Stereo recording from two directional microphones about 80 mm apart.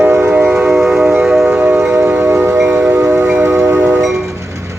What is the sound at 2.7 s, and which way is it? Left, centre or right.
Wind chime, centre.